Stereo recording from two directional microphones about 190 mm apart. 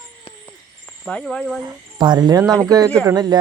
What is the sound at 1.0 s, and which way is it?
Speech, 5° left (ahead or behind).